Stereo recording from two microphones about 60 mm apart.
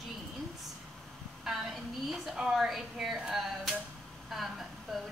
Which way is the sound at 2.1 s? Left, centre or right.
Centre.